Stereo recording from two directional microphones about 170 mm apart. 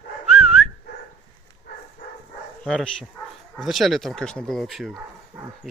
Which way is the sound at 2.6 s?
5° left (ahead or behind).